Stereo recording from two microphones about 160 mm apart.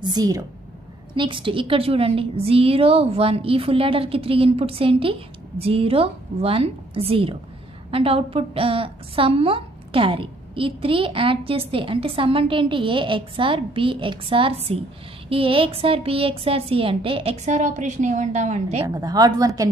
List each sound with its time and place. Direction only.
0.0 s a woman's voice: 25° right (ahead or behind); by 18.9 s 45° right (ahead or behind)
18.9 s a woman's voice: 25° right (ahead or behind)